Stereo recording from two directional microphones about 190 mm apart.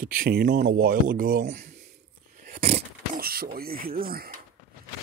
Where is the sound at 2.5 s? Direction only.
35° right (ahead or behind).